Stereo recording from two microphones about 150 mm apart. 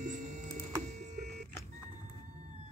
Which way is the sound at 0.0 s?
55° right (ahead or behind).